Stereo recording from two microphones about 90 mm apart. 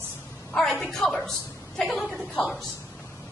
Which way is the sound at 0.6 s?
5° left (ahead or behind).